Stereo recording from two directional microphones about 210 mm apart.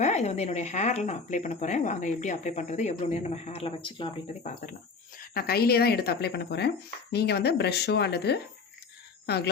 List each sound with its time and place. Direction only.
0.0 s speech: 35° left (ahead or behind)
5.1 s speech: 45° left (ahead or behind)